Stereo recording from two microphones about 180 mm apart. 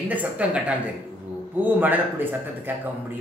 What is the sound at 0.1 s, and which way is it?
Speech, 5° right (ahead or behind).